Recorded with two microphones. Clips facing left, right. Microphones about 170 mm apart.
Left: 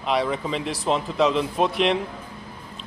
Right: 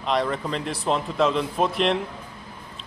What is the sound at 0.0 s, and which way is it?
A man's voice, 5° left (ahead or behind).